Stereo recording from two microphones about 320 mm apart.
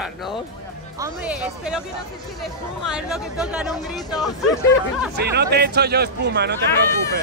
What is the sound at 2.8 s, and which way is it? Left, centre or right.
Speech, centre.